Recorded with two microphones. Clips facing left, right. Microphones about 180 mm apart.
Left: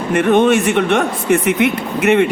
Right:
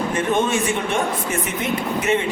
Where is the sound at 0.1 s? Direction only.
65° left (ahead or behind).